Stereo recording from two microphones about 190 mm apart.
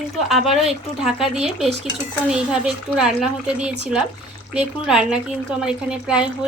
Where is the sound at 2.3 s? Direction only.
5° right (ahead or behind).